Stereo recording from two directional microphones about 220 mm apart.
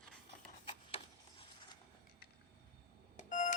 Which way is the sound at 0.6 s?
25° left (ahead or behind).